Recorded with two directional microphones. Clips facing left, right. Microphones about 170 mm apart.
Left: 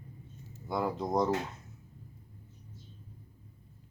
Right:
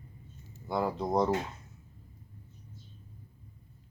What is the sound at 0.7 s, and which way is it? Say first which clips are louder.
Speech: right 1 dB; centre (ahead or behind).